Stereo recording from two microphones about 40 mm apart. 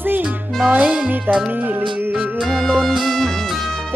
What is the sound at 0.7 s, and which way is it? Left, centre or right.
Music, right.